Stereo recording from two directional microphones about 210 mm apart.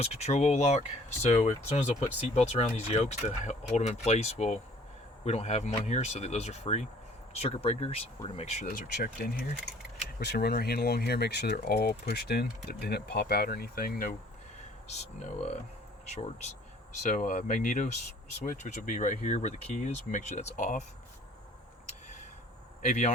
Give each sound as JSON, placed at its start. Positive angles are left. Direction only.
{"t": 0.0, "sound": "speech", "side_deg": 30}
{"t": 9.2, "sound": "speech", "side_deg": 45}
{"t": 14.8, "sound": "speech", "side_deg": 35}
{"t": 17.0, "sound": "speech", "side_deg": 35}
{"t": 22.8, "sound": "speech", "side_deg": 35}